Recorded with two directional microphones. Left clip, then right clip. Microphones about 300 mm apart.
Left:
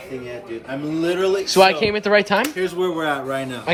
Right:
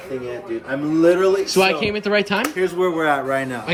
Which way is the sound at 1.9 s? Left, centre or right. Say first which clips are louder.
Left 3 dB; centre.